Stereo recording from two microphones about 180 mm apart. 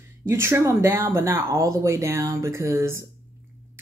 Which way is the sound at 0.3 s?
15° right (ahead or behind).